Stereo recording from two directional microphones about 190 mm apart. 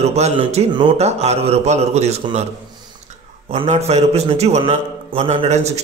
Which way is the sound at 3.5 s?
35° right (ahead or behind).